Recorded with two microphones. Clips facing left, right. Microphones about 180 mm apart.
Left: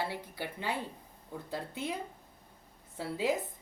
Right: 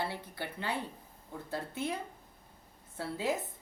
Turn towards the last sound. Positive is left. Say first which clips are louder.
# left 2 dB
turn(degrees=15)  # may be behind; listen again after turning